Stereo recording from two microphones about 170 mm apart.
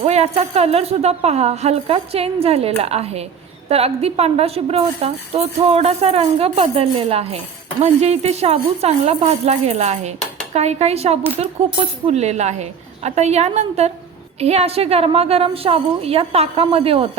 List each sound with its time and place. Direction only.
0.0 s a woman's voice: 40° right (ahead or behind)